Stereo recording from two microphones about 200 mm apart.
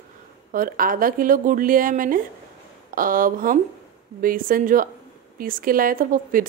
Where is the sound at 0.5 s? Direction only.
45° right (ahead or behind).